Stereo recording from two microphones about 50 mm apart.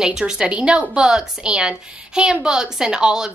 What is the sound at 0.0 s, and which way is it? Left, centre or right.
A woman's voice, centre.